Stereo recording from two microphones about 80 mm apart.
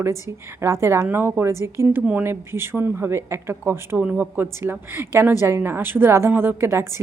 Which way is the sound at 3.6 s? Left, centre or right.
Right.